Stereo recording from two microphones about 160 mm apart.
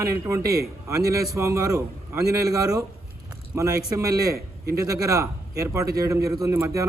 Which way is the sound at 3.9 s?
20° right (ahead or behind).